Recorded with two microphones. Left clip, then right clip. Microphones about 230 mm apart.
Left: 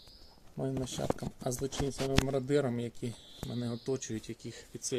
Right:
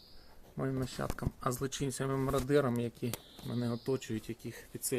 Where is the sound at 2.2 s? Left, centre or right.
Centre.